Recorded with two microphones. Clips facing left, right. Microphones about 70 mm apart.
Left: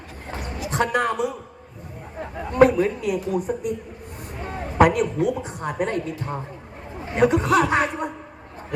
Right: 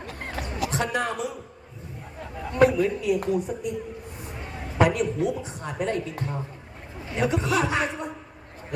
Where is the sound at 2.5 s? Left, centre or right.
Left.